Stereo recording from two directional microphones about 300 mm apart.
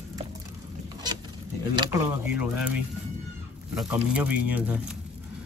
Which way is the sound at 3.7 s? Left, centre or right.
Centre.